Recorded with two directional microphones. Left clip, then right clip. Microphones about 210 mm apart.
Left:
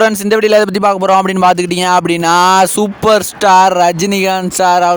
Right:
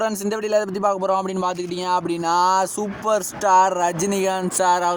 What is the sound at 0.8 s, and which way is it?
Speech, 50° left (ahead or behind).